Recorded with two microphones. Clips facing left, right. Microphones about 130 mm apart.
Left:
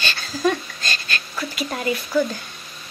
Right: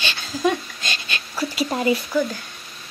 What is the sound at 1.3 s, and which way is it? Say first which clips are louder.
Speech: right 5 dB; 25° right (ahead or behind).